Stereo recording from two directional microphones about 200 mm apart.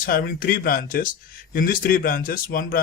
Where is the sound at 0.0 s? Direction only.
45° left (ahead or behind).